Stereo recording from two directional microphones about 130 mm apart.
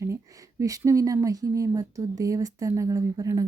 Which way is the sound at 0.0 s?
25° right (ahead or behind).